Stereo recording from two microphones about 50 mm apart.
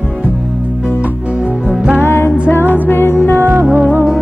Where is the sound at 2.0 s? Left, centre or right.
Left.